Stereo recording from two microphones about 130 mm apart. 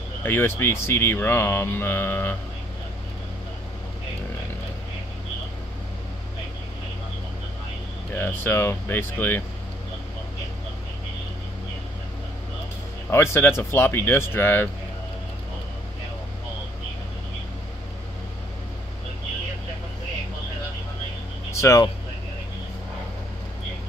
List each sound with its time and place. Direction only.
0.2 s speech: 15° left (ahead or behind)
8.1 s speech: 15° left (ahead or behind)
13.1 s speech: 20° left (ahead or behind)
21.5 s a sound: 20° left (ahead or behind)